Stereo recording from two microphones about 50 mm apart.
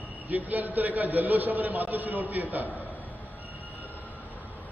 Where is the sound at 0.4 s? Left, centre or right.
Right.